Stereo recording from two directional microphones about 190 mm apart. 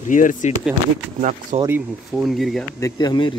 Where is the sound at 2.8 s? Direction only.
20° left (ahead or behind).